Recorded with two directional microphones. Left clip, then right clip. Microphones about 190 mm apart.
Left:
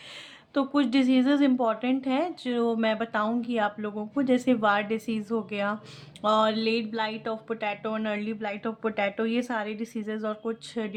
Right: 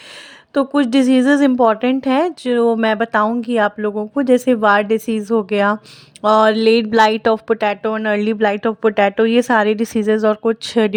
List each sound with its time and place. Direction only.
0.5 s speech: 40° right (ahead or behind)